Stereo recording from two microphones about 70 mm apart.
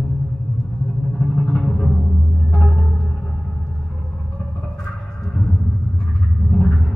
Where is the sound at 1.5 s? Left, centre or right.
Centre.